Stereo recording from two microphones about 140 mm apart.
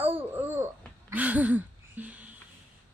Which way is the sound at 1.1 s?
10° right (ahead or behind).